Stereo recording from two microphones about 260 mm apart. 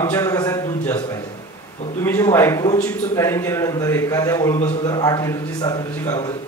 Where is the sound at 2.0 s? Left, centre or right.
Centre.